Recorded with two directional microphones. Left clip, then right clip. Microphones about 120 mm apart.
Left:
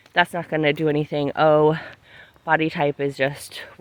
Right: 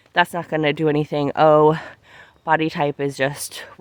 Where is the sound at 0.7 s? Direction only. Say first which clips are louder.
Right 2 dB; 70° right (ahead or behind); by 3.0 s 55° right (ahead or behind).